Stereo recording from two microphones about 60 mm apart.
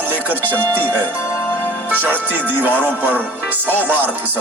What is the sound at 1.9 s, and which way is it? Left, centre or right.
Speech, right.